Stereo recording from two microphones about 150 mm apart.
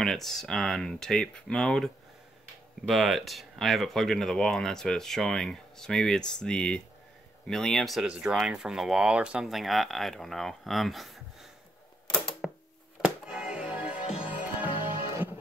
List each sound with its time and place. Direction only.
0.0 s speech: centre (ahead or behind)
2.9 s speech: centre (ahead or behind)
12.4 s a sound: 5° right (ahead or behind)
13.0 s music: 5° right (ahead or behind)
14.0 s music: 40° left (ahead or behind)